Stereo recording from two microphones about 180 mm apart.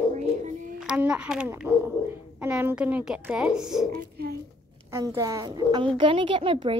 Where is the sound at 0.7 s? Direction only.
5° right (ahead or behind).